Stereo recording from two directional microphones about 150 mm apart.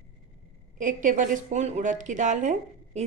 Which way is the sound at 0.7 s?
60° right (ahead or behind).